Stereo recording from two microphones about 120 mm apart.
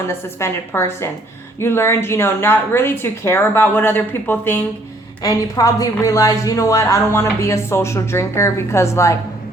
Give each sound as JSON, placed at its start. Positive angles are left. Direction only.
{"t": 0.1, "sound": "speech", "side_deg": 20}
{"t": 5.2, "sound": "speech", "side_deg": 30}